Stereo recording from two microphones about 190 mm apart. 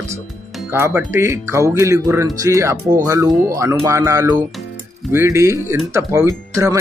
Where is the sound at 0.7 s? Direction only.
15° right (ahead or behind).